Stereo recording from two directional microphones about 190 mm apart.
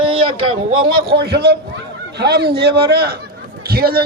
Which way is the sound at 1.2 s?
60° right (ahead or behind).